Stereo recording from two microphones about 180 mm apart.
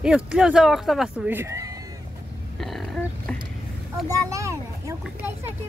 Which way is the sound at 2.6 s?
Centre (ahead or behind).